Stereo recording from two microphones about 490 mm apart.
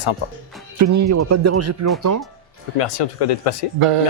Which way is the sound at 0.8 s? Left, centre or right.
Right.